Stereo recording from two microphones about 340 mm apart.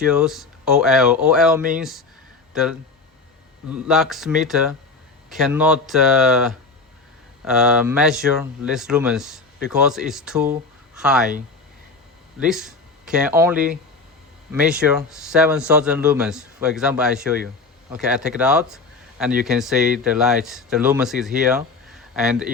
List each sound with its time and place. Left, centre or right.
0.0 s speech: centre
12.4 s speech: centre